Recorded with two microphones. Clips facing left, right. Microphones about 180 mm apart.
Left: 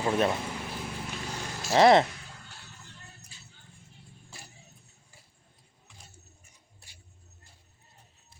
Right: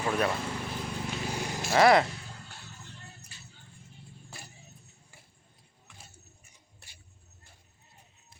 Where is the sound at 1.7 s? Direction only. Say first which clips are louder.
Left 2 dB; 25° left (ahead or behind).